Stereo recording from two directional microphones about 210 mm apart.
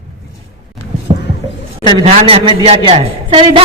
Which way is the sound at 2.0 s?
25° right (ahead or behind).